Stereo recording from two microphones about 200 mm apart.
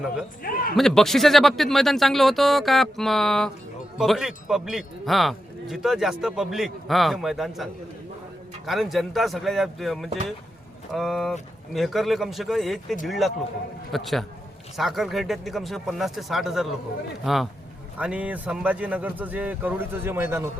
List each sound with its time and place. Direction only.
0.4 s a man's voice: 45° left (ahead or behind)
0.8 s a man's voice: centre (ahead or behind)